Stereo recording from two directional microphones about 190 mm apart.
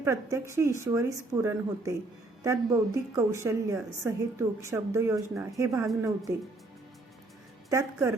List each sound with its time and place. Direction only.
0.0 s a woman's voice: 15° right (ahead or behind)
7.7 s a woman's voice: 15° right (ahead or behind)